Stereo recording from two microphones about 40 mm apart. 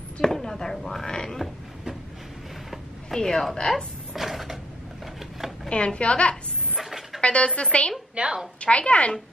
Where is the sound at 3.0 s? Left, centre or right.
Centre.